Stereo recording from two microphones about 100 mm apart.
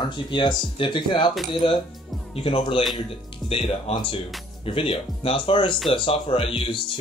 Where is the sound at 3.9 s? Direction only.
60° left (ahead or behind).